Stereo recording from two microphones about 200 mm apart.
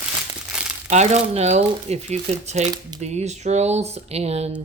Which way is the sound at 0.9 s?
35° right (ahead or behind).